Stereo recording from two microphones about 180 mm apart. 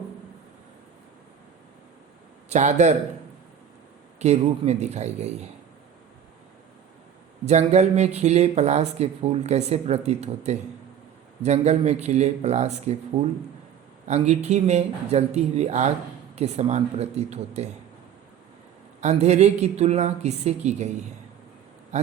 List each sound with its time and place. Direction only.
2.5 s speech: 40° right (ahead or behind)
4.2 s speech: 35° right (ahead or behind)
7.4 s speech: 40° right (ahead or behind)
18.9 s speech: 40° right (ahead or behind)
21.9 s speech: 40° right (ahead or behind)